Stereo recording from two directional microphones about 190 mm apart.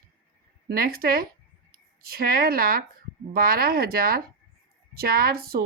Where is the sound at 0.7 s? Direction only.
50° right (ahead or behind).